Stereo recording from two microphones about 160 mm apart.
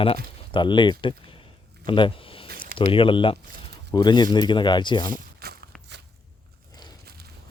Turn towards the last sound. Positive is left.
turn(degrees=-75)  # may be behind; listen again after turning